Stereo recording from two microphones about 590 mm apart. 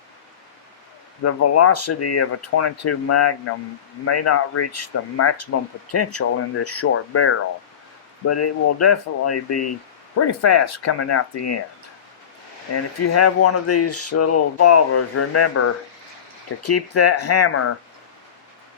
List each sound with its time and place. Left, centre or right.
1.2 s speech: left
12.7 s speech: left